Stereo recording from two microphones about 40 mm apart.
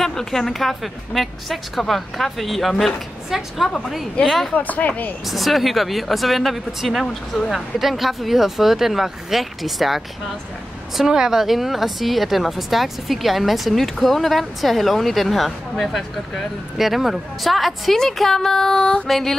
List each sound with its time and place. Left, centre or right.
0.0 s a woman's voice: centre
4.6 s speech: left
5.2 s a woman's voice: centre
11.1 s a woman's voice: centre
19.0 s a woman's voice: centre